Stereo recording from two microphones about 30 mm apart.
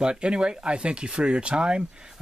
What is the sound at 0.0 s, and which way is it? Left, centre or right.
Speech, right.